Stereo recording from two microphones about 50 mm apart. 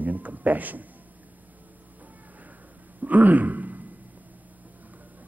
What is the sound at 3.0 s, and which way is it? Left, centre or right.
Speech, right.